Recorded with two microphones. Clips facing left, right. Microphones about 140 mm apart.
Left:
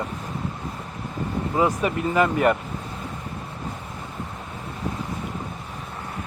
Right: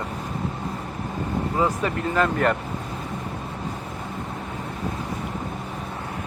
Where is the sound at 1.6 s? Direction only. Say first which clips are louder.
Left 3 dB; 15° left (ahead or behind).